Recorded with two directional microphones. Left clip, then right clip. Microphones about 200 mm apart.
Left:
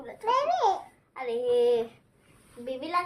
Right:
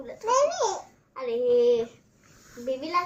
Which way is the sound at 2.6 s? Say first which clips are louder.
Right 3 dB; 15° left (ahead or behind).